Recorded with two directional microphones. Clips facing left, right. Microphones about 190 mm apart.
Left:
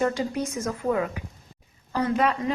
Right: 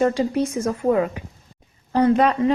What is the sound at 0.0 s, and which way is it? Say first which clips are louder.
Speech: right 6 dB; 30° right (ahead or behind).